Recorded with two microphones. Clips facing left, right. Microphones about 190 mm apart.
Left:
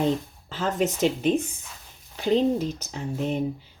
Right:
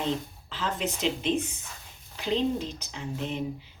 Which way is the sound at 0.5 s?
45° left (ahead or behind).